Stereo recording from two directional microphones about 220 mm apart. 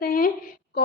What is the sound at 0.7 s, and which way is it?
Child singing, 45° left (ahead or behind).